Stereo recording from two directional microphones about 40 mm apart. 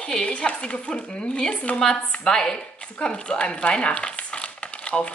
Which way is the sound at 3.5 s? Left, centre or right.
Left.